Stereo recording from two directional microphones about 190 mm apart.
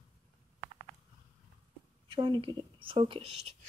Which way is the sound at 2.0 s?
25° right (ahead or behind).